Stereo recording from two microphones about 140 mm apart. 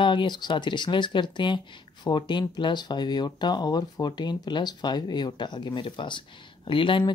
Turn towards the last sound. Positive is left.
turn(degrees=35)  # may be behind; listen again after turning